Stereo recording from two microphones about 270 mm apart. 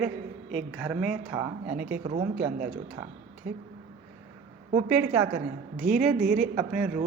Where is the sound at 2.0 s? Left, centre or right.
Right.